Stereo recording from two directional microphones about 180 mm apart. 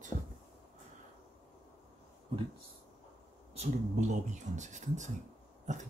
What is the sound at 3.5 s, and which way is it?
Speech, 40° right (ahead or behind).